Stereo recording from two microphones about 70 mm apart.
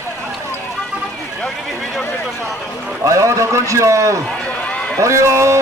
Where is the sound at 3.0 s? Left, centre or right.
Right.